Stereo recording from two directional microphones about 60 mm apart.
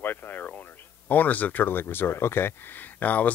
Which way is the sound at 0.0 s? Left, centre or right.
Left.